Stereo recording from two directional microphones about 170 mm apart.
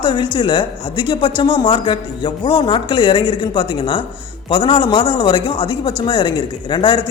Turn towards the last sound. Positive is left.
turn(degrees=25)  # may be behind; listen again after turning